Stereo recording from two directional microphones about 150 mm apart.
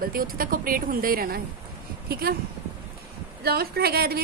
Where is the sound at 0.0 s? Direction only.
75° right (ahead or behind).